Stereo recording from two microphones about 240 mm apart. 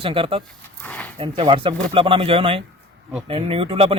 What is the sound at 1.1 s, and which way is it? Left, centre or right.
A man's voice, right.